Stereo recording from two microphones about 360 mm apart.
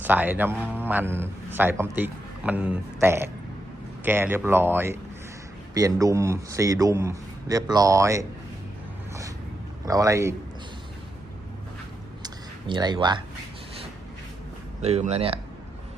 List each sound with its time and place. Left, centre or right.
0.0 s a man's voice: centre
9.8 s a man's voice: centre
12.2 s a sound: centre
14.8 s a man's voice: centre